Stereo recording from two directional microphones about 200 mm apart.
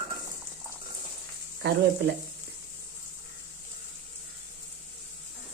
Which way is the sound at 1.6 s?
55° right (ahead or behind).